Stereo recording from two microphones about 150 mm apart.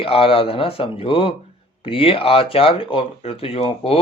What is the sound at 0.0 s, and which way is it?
Speech, 35° left (ahead or behind).